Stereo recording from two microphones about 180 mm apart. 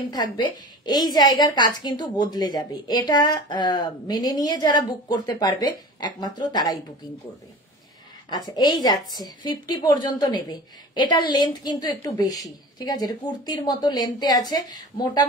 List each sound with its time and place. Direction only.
0.1 s a woman's voice: 25° left (ahead or behind)
8.3 s a woman's voice: 20° left (ahead or behind)